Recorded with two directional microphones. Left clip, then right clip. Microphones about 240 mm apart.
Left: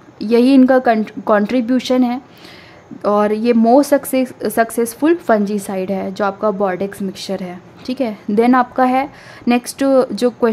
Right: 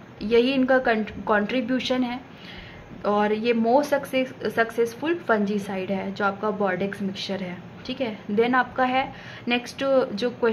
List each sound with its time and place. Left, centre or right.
0.2 s speech: left